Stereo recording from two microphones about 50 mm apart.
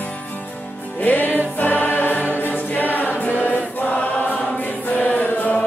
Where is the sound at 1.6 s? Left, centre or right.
Left.